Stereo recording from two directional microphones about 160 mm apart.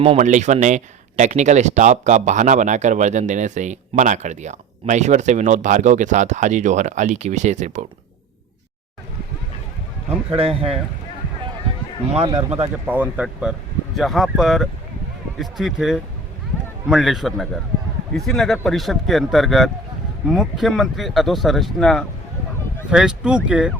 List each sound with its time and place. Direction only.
0.0 s speech: 45° right (ahead or behind)
10.3 s speech: 35° right (ahead or behind)
12.2 s speech: 25° right (ahead or behind)
12.9 s speech: 10° right (ahead or behind)